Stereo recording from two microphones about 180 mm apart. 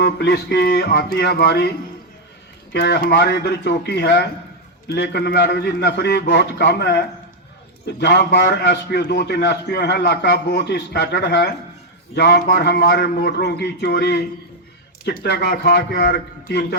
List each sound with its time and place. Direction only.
0.0 s a man's voice: 65° left (ahead or behind)
2.7 s a man's voice: 65° left (ahead or behind)